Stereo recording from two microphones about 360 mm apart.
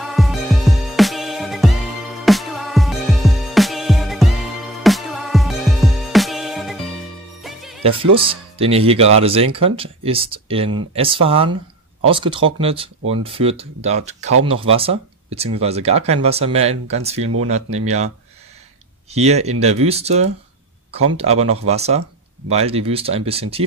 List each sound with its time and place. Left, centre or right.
0.0 s music: centre
7.8 s speech: centre
19.1 s speech: centre